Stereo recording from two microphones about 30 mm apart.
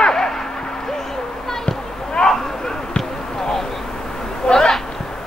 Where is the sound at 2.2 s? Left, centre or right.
Left.